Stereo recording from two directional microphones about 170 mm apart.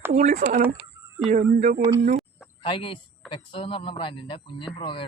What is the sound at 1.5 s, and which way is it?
Speech, 50° right (ahead or behind).